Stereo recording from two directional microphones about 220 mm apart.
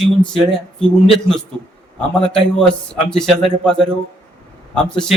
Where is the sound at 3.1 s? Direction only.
5° left (ahead or behind).